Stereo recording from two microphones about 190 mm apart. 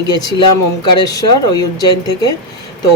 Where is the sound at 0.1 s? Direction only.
20° left (ahead or behind).